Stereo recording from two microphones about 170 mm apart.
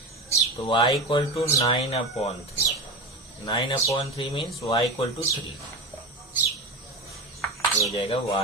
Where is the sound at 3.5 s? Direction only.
30° left (ahead or behind).